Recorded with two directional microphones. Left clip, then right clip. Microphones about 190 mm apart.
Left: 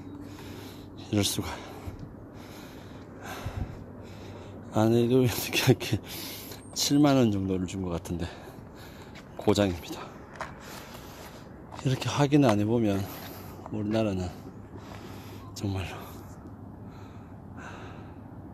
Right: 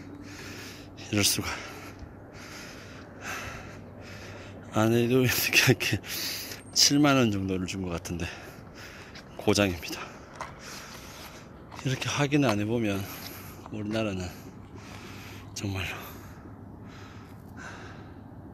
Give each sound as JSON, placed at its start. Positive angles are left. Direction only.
{"t": 1.1, "sound": "speech", "side_deg": 10}
{"t": 3.3, "sound": "snort", "side_deg": 10}
{"t": 4.7, "sound": "speech", "side_deg": 10}
{"t": 9.4, "sound": "a sound", "side_deg": 5}
{"t": 11.7, "sound": "speech", "side_deg": 20}
{"t": 15.5, "sound": "speech", "side_deg": 10}